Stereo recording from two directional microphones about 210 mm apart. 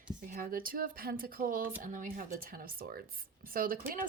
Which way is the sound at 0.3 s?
40° right (ahead or behind).